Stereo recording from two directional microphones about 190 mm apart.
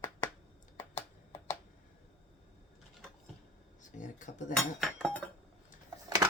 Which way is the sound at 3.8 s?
40° left (ahead or behind).